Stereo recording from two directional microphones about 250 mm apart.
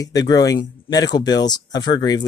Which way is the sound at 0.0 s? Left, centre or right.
Centre.